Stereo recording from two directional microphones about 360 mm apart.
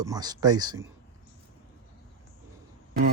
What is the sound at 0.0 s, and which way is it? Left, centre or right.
Speech, centre.